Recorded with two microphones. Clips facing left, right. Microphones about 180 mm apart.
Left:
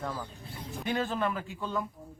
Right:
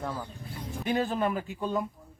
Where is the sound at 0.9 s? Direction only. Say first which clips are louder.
Right 3 dB; 15° right (ahead or behind).